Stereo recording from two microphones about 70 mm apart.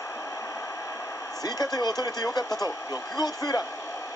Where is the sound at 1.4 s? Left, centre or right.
Left.